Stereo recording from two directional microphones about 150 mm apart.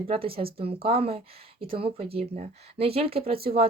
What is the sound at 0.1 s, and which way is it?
Speech, 40° right (ahead or behind).